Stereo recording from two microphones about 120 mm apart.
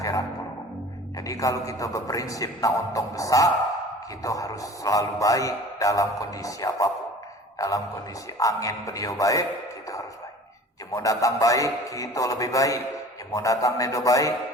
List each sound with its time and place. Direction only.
0.0 s music: 30° left (ahead or behind)
1.2 s speech: 30° left (ahead or behind)
10.9 s speech: 30° left (ahead or behind)